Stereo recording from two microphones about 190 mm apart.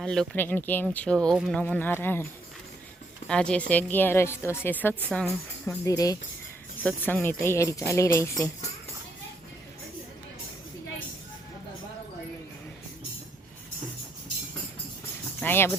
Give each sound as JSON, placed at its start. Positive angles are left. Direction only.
{"t": 0.0, "sound": "speech", "side_deg": 5}
{"t": 3.2, "sound": "speech", "side_deg": 5}
{"t": 5.8, "sound": "speech", "side_deg": 20}
{"t": 15.4, "sound": "music", "side_deg": 10}